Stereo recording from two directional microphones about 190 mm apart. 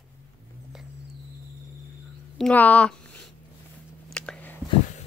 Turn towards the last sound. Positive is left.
turn(degrees=5)  # may be behind; listen again after turning